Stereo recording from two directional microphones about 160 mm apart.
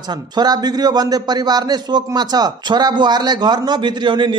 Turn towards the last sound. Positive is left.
turn(degrees=-30)  # may be behind; listen again after turning